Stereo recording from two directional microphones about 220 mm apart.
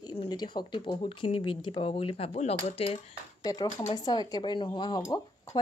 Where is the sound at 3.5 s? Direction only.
15° left (ahead or behind).